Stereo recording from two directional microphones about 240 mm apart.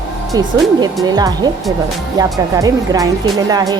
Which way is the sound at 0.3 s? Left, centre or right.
Centre.